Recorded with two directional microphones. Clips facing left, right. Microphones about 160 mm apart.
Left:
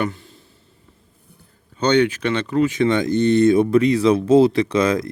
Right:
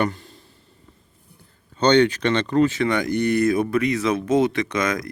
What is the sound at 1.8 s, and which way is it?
Speech, 10° left (ahead or behind).